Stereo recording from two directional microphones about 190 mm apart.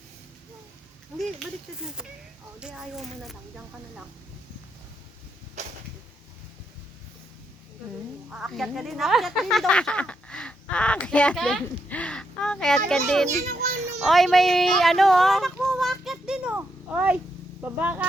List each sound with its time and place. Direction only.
2.6 s speech: 5° right (ahead or behind)
5.6 s a sound: 35° right (ahead or behind)
8.3 s speech: centre (ahead or behind)
13.3 s children playing: 40° right (ahead or behind)
14.0 s speech: centre (ahead or behind)
15.6 s a sound: centre (ahead or behind)
17.6 s speech: 10° right (ahead or behind)